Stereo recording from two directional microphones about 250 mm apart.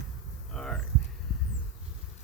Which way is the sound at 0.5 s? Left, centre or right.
Centre.